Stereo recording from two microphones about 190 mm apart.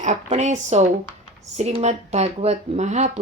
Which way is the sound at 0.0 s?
40° right (ahead or behind).